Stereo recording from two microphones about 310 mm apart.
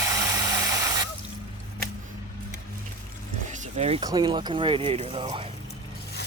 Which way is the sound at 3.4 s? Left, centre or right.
Right.